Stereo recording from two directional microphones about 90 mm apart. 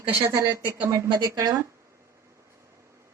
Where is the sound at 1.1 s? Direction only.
50° right (ahead or behind).